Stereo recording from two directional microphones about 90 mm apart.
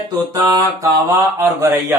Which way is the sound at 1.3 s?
30° right (ahead or behind).